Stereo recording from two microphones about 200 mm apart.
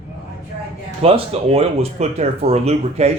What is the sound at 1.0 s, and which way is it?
Speech, 30° right (ahead or behind).